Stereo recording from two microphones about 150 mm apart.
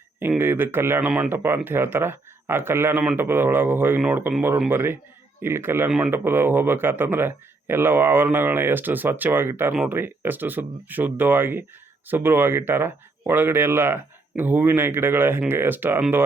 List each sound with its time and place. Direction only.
0.2 s speech: 15° right (ahead or behind)